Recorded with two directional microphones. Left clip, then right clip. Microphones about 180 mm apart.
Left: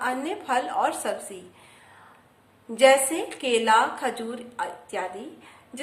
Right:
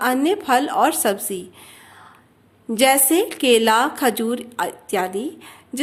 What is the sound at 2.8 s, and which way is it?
A woman's voice, 50° right (ahead or behind).